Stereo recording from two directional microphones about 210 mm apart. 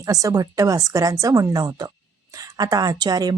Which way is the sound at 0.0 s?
15° right (ahead or behind).